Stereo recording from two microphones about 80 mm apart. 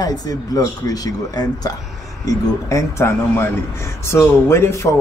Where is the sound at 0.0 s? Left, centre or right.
Left.